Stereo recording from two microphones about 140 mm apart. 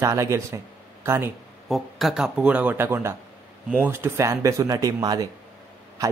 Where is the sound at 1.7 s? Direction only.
Centre (ahead or behind).